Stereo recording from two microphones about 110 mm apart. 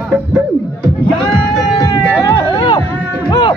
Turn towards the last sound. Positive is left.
turn(degrees=45)  # may be behind; listen again after turning